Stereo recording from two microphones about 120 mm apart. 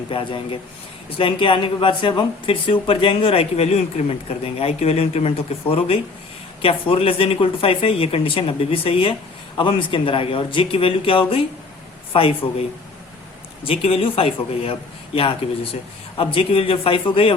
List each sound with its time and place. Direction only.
0.1 s a man's voice: 50° left (ahead or behind)
13.7 s a man's voice: 55° left (ahead or behind)